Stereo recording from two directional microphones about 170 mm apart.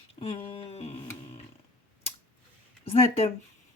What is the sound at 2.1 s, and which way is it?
Scissors, 35° left (ahead or behind).